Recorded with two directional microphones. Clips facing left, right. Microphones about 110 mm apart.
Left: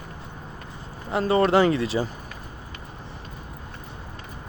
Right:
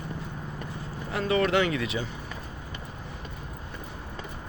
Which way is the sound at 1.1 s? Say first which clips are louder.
Left 5 dB; 35° left (ahead or behind).